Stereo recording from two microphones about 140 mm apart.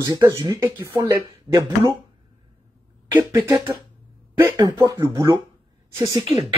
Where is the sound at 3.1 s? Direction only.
30° right (ahead or behind).